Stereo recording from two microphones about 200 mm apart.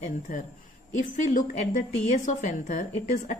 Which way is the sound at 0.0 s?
40° left (ahead or behind).